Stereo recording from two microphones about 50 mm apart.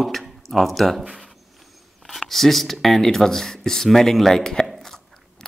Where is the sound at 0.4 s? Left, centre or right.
Centre.